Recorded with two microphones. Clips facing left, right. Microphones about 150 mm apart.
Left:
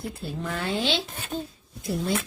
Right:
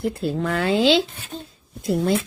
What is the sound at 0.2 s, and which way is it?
Speech, 90° right.